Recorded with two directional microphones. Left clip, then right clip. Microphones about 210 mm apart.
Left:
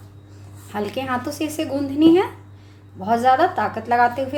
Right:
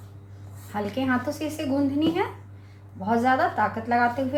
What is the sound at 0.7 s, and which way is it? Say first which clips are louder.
Speech: left 2 dB; 45° left (ahead or behind).